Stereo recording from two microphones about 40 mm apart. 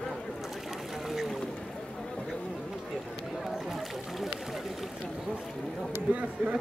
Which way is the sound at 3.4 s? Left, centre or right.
Centre.